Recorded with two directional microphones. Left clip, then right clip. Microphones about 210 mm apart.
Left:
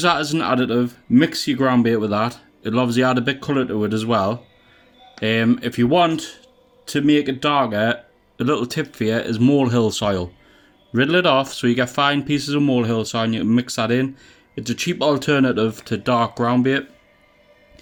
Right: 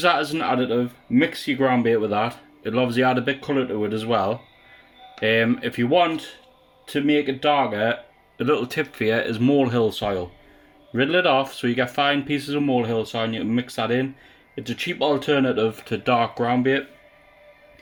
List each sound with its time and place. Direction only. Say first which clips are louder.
0.0 s speech: left 1 dB; 25° left (ahead or behind)